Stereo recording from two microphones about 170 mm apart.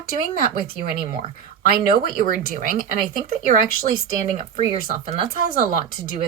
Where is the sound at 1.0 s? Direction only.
55° right (ahead or behind).